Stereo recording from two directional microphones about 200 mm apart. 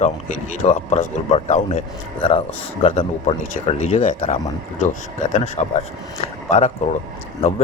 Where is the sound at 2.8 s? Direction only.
30° left (ahead or behind).